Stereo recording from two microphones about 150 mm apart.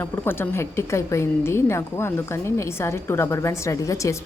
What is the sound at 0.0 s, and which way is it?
A woman's voice, 15° left (ahead or behind).